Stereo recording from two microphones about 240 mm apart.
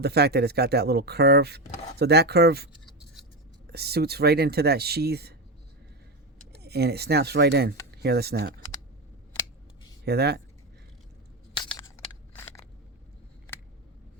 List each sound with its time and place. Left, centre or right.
0.0 s speech: right
3.7 s speech: right
6.6 s speech: right
10.1 s speech: right
11.5 s a sound: centre